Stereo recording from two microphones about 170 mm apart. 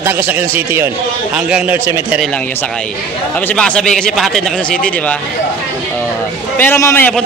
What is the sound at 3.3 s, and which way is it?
Speech, 10° left (ahead or behind).